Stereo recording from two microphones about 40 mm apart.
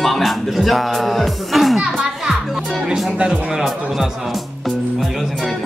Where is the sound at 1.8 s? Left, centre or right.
Centre.